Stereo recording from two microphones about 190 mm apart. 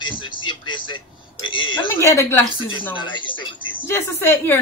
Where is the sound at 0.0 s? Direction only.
25° left (ahead or behind).